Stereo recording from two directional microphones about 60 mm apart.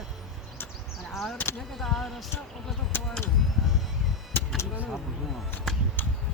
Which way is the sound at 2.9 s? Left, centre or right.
Left.